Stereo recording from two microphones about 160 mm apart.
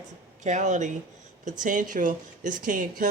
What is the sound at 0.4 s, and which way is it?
Speech, 50° right (ahead or behind).